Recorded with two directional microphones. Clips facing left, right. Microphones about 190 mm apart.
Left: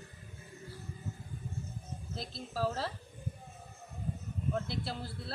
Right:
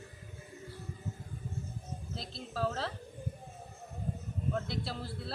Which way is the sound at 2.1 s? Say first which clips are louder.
Left 2 dB; centre (ahead or behind).